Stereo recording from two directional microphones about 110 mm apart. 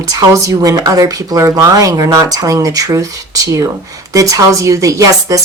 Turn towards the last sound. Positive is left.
turn(degrees=-30)  # may be behind; listen again after turning